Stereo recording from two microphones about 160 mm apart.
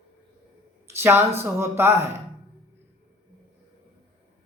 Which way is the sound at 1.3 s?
15° right (ahead or behind).